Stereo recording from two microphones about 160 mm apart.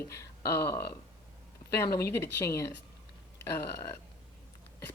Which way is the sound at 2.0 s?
15° left (ahead or behind).